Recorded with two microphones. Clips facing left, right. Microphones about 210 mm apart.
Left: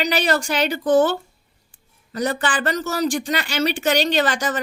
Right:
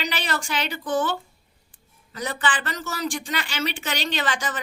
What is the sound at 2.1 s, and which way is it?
Speech, 45° left (ahead or behind).